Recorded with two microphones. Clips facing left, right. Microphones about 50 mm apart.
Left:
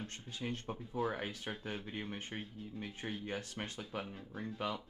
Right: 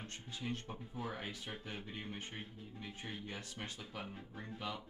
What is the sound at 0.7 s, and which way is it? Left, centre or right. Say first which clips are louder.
Speech: left 5 dB; left.